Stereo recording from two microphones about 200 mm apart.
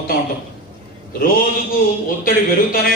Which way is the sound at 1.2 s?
45° left (ahead or behind).